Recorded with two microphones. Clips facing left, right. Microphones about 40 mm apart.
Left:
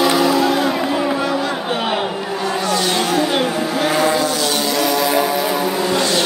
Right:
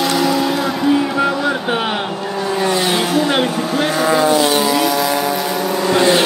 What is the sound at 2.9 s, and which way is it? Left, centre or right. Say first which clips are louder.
Vehicle: right 1 dB; centre.